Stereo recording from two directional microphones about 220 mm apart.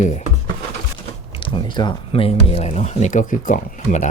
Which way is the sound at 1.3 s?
20° left (ahead or behind).